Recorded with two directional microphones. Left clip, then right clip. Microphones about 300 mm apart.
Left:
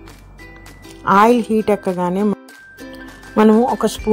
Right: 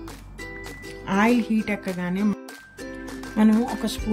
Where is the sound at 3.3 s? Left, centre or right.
Left.